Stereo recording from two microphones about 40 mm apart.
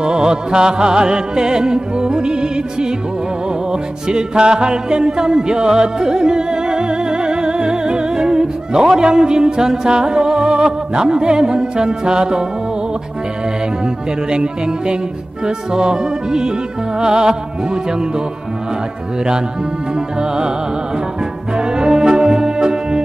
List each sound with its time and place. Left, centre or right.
0.0 s music: right
4.1 s music: right
14.3 s music: right
20.2 s music: centre
21.5 s music: right